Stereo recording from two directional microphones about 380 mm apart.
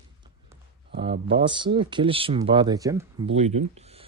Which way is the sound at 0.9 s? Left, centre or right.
Centre.